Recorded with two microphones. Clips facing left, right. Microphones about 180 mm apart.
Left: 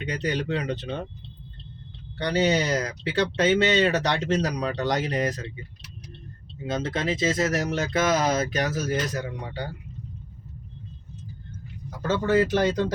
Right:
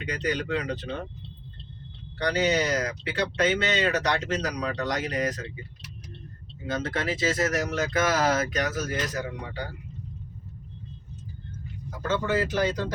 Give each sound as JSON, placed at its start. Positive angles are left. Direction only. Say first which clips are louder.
{"t": 0.0, "sound": "speech", "louder": "left 1 dB", "side_deg": 30}
{"t": 2.1, "sound": "speech", "louder": "left 2 dB", "side_deg": 30}
{"t": 6.7, "sound": "speech", "louder": "left 2 dB", "side_deg": 20}
{"t": 8.5, "sound": "speech", "louder": "left 2 dB", "side_deg": 30}
{"t": 12.0, "sound": "speech", "louder": "left 4 dB", "side_deg": 40}